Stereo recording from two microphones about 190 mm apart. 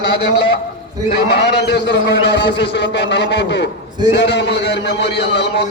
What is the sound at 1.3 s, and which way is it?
A man's voice, 60° left (ahead or behind).